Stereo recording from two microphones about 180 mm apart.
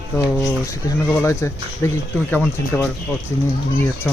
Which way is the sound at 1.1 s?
15° left (ahead or behind).